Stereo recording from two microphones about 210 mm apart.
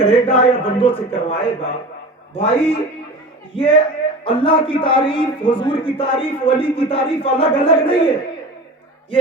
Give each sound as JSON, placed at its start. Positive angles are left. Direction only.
{"t": 0.0, "sound": "a man's voice", "side_deg": 25}